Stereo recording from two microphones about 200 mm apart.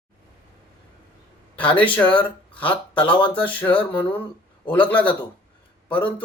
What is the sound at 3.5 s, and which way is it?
Speech, 10° left (ahead or behind).